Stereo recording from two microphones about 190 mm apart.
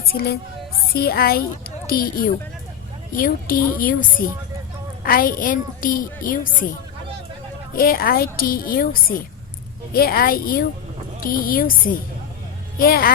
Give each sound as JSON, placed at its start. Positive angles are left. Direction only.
{"t": 0.1, "sound": "a woman's voice", "side_deg": 55}
{"t": 7.8, "sound": "a woman's voice", "side_deg": 50}